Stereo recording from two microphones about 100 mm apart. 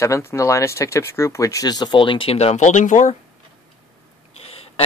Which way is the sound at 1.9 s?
60° left (ahead or behind).